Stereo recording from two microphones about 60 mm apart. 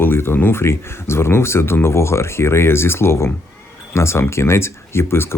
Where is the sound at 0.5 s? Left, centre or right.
Left.